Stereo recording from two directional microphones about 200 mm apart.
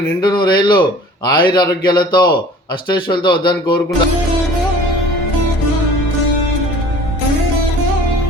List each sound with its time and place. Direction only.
0.2 s a man's voice: 20° left (ahead or behind)